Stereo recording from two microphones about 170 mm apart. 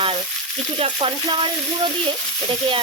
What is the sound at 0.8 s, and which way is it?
Frying, 30° right (ahead or behind).